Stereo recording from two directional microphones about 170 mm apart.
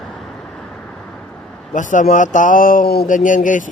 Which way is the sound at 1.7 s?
50° left (ahead or behind).